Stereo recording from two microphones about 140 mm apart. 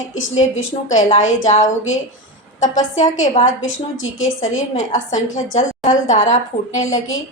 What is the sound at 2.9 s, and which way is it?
Speech, 60° left (ahead or behind).